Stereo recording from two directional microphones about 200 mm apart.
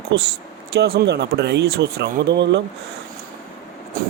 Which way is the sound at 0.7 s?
50° right (ahead or behind).